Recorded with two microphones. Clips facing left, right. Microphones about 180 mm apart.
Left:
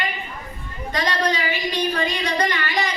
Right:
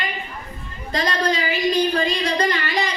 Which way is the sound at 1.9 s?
30° right (ahead or behind).